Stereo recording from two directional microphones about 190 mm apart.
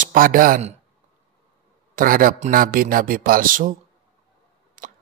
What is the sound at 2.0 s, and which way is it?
A man's voice, 45° right (ahead or behind).